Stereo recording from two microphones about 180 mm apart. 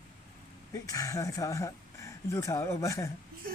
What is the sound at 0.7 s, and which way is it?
Speech, 20° left (ahead or behind).